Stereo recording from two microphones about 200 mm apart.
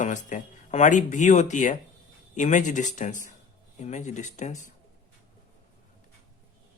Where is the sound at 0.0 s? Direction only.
40° left (ahead or behind).